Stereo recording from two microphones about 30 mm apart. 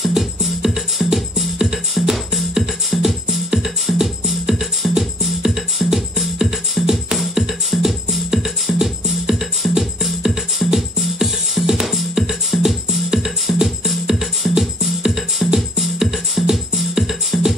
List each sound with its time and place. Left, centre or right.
0.0 s music: centre
2.9 s music: centre
6.4 s music: centre
7.3 s music: centre